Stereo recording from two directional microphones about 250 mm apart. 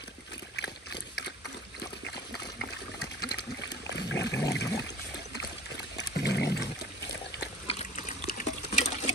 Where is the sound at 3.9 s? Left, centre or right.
Left.